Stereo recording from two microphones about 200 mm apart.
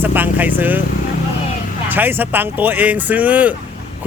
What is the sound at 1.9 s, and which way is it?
Speech, 10° right (ahead or behind).